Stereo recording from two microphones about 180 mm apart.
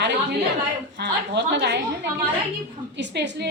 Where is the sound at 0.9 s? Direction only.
75° right (ahead or behind).